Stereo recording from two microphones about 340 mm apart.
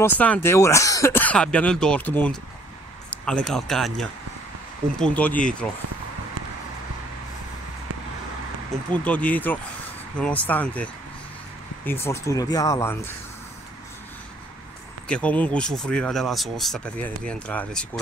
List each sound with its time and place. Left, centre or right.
0.2 s a man's voice: centre
8.9 s speech: centre
15.0 s speech: centre